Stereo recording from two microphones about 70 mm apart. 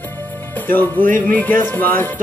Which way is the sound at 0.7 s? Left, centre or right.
Left.